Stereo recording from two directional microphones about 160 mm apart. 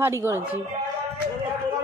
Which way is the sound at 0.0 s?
15° right (ahead or behind).